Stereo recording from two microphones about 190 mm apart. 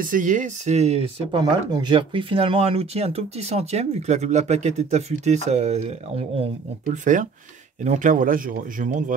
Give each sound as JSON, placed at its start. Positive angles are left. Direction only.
{"t": 0.0, "sound": "speech", "side_deg": -45}
{"t": 1.4, "sound": "speech", "side_deg": -25}